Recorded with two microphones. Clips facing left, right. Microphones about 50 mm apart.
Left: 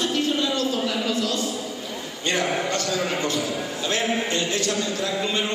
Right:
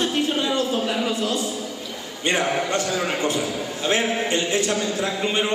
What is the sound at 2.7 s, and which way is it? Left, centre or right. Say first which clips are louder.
A man's voice: right 1 dB; right.